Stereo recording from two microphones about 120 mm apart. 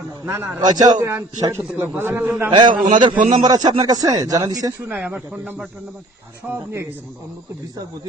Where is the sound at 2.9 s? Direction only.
40° right (ahead or behind).